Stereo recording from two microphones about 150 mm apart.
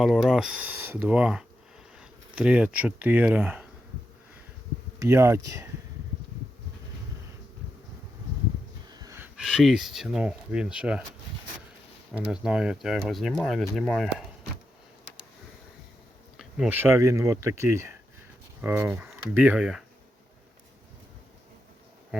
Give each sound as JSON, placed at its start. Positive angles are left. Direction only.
{"t": 0.0, "sound": "speech", "side_deg": 0}
{"t": 4.9, "sound": "speech", "side_deg": -20}
{"t": 8.9, "sound": "snort", "side_deg": -25}
{"t": 9.2, "sound": "speech", "side_deg": -5}
{"t": 12.1, "sound": "speech", "side_deg": -5}
{"t": 16.4, "sound": "speech", "side_deg": -5}